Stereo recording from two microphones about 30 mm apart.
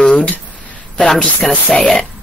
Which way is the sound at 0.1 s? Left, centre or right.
Left.